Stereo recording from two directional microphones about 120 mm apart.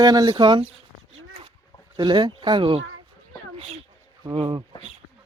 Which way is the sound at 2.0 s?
40° right (ahead or behind).